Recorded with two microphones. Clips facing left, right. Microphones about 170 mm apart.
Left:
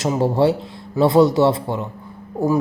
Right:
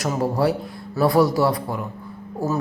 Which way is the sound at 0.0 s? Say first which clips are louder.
Left 4 dB; 25° left (ahead or behind).